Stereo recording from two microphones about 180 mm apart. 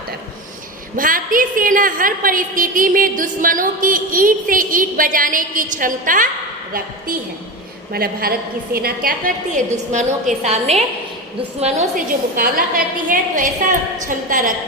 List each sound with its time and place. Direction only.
0.9 s a woman's voice: 50° right (ahead or behind)
7.9 s a woman's voice: 55° right (ahead or behind)
9.7 s a woman's voice: 40° right (ahead or behind)
12.4 s a woman's voice: 50° right (ahead or behind)